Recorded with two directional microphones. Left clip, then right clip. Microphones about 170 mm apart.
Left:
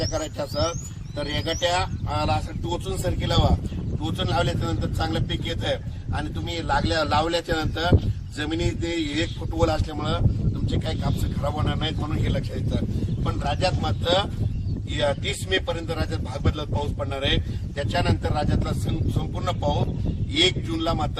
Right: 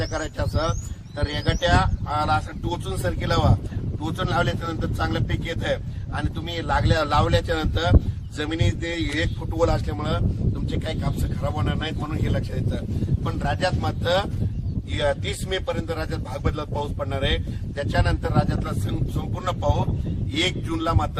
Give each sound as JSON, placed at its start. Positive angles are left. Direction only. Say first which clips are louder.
{"t": 0.0, "sound": "a man's voice", "louder": "even", "side_deg": 0}